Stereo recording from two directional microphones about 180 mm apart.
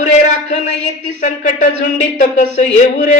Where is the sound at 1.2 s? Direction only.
45° left (ahead or behind).